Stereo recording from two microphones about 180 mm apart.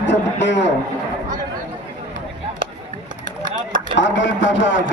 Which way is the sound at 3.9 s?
90° left.